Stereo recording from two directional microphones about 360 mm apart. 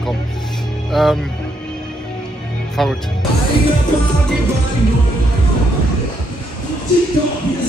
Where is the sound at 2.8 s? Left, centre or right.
Centre.